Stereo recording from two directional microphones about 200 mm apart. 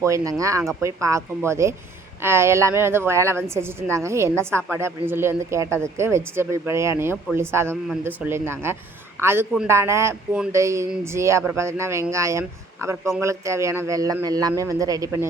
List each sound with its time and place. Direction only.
0.0 s a woman's voice: 15° right (ahead or behind)